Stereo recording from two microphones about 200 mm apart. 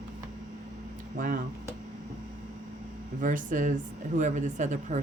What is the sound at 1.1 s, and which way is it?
Speech, 45° right (ahead or behind).